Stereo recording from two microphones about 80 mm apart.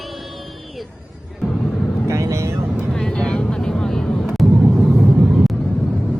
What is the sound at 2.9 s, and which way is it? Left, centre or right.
Vehicle, centre.